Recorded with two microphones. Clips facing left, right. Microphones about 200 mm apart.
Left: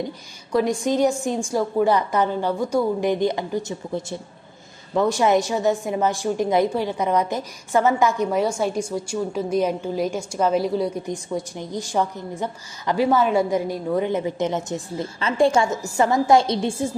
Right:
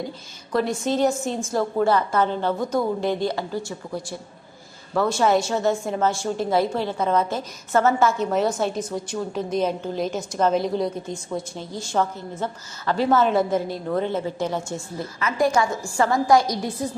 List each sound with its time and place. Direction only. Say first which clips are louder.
0.0 s a woman's voice: left 2 dB; 15° left (ahead or behind)